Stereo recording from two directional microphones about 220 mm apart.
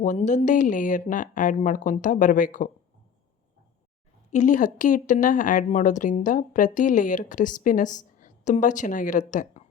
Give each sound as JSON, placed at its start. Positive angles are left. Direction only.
{"t": 0.0, "sound": "a woman's voice", "side_deg": 35}
{"t": 4.3, "sound": "a woman's voice", "side_deg": 35}